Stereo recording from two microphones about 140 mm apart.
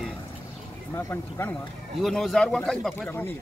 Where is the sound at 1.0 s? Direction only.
20° left (ahead or behind).